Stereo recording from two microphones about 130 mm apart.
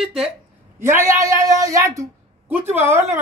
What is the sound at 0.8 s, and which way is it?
A woman's voice, 20° right (ahead or behind).